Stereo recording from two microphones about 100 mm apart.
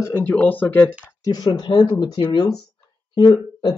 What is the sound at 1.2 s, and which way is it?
Speech, 45° left (ahead or behind).